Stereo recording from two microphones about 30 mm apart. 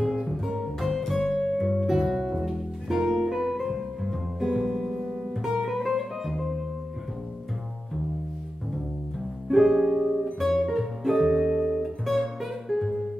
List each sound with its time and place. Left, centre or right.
0.0 s music: right
0.6 s music: centre
3.1 s music: centre
9.5 s music: centre